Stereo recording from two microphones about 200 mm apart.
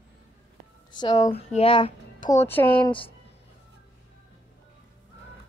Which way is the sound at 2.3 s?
10° left (ahead or behind).